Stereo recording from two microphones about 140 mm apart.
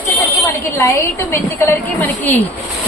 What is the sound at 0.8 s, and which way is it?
A woman's voice, 20° left (ahead or behind).